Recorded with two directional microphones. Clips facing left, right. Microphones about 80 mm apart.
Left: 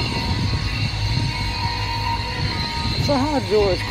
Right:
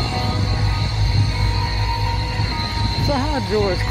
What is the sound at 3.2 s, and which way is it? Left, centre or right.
Speech, right.